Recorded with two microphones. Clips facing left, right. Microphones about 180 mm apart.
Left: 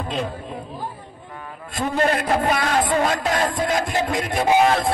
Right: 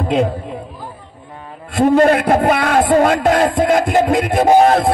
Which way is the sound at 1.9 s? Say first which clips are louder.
Right 9 dB; 50° right (ahead or behind).